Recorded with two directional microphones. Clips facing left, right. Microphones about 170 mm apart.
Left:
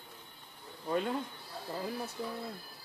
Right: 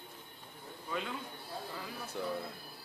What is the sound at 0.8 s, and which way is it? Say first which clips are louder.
Speech: left 7 dB; 45° left (ahead or behind).